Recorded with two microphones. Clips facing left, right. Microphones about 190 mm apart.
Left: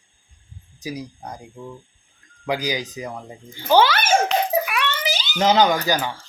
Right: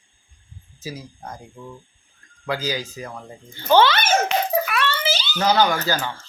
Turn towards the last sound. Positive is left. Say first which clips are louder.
# left 2 dB
turn(degrees=15)  # may be behind; listen again after turning